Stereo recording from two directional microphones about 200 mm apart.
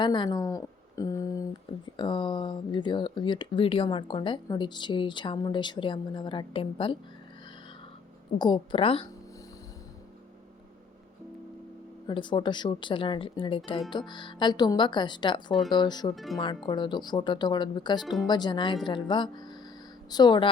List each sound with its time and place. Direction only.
0.0 s speech: 25° left (ahead or behind)
8.4 s speech: 20° left (ahead or behind)
12.0 s speech: 25° left (ahead or behind)
16.1 s speech: centre (ahead or behind)
16.6 s speech: 20° left (ahead or behind)